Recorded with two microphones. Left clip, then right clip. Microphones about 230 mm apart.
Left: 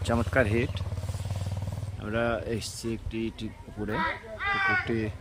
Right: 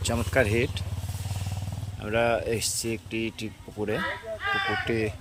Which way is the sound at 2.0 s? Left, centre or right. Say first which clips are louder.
Right 4 dB; centre.